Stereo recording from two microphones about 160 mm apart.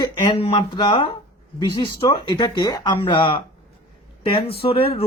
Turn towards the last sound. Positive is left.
turn(degrees=35)  # may be behind; listen again after turning